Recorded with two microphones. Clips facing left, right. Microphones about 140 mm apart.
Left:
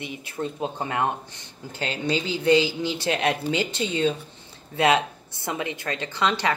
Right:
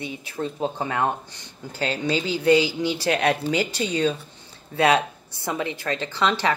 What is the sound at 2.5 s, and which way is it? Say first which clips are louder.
Speech: right 1 dB; 15° right (ahead or behind).